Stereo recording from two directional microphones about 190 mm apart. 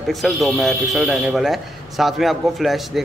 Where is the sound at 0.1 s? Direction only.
Centre (ahead or behind).